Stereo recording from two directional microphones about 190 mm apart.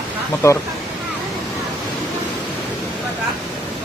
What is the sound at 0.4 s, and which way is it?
Speech, 15° left (ahead or behind).